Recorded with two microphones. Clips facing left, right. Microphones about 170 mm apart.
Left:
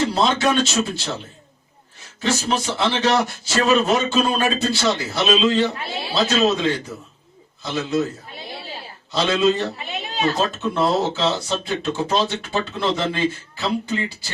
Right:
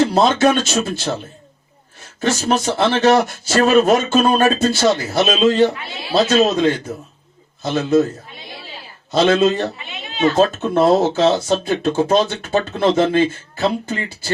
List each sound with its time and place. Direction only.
0.1 s speech: 50° right (ahead or behind)
2.2 s speech: 45° right (ahead or behind)
9.1 s speech: 50° right (ahead or behind)